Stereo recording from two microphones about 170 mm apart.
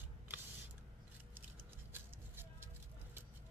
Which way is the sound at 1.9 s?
15° right (ahead or behind).